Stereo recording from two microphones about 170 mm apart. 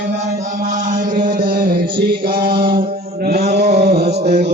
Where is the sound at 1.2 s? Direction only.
50° right (ahead or behind); by 4.1 s 70° right (ahead or behind).